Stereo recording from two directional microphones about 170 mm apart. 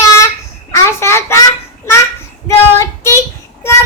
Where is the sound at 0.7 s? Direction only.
15° left (ahead or behind).